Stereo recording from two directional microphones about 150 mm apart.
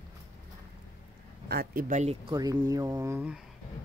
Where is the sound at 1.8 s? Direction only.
55° right (ahead or behind).